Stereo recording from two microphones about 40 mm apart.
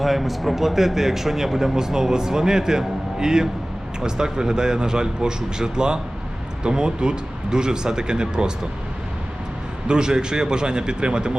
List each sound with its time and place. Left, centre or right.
0.0 s a man's voice: centre; by 8.5 s right
9.8 s speech: right